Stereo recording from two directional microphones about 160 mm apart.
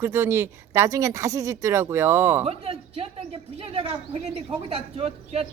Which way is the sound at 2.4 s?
40° right (ahead or behind).